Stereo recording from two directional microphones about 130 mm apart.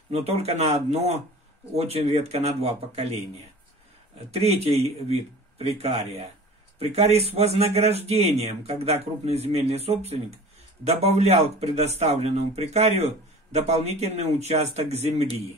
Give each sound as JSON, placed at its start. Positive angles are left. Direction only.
{"t": 0.1, "sound": "speech", "side_deg": -50}
{"t": 4.3, "sound": "speech", "side_deg": -50}